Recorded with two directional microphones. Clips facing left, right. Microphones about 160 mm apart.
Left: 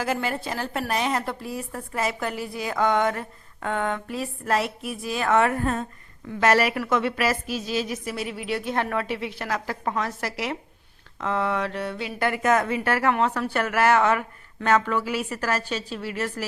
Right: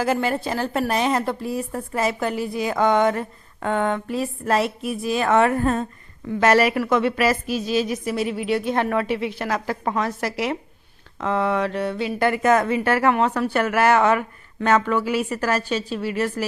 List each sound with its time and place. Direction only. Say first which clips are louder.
0.0 s a woman's voice: right 5 dB; 30° right (ahead or behind)